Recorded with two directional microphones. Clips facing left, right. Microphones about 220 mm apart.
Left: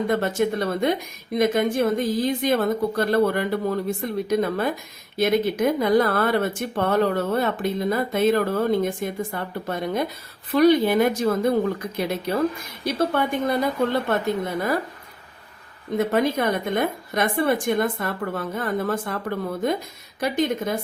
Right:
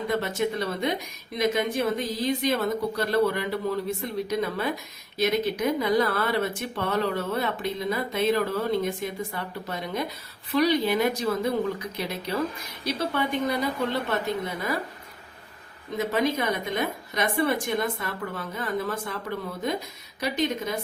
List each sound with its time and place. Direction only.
0.1 s speech: 50° left (ahead or behind)
16.0 s speech: 50° left (ahead or behind)
20.1 s speech: 50° left (ahead or behind)